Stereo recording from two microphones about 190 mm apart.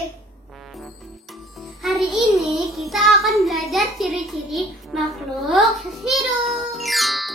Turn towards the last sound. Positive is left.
turn(degrees=0)  # may be behind; listen again after turning